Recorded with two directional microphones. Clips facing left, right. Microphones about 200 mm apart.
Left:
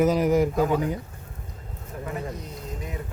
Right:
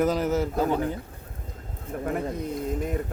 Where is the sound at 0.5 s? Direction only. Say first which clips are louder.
Left 2 dB; 35° right (ahead or behind).